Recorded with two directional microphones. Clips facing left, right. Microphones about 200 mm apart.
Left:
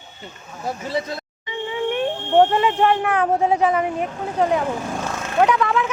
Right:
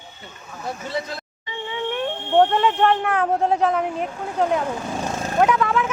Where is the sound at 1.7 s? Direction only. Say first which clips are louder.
Left 3 dB; 20° left (ahead or behind).